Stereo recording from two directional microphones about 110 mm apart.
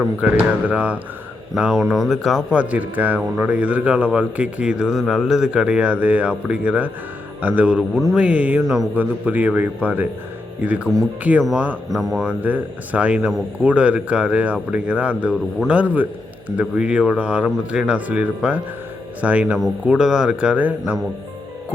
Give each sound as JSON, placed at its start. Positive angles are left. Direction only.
{"t": 0.2, "sound": "a man's voice", "side_deg": -15}
{"t": 1.7, "sound": "a man's voice", "side_deg": 5}
{"t": 8.6, "sound": "speech", "side_deg": 0}
{"t": 9.0, "sound": "a man's voice", "side_deg": -15}
{"t": 11.9, "sound": "speech", "side_deg": 0}
{"t": 12.4, "sound": "a man's voice", "side_deg": -15}